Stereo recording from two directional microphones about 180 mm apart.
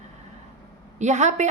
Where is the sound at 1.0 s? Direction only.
40° right (ahead or behind).